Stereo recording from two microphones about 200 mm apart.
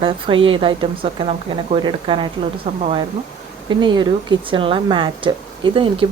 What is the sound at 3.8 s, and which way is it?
Speech, 20° right (ahead or behind).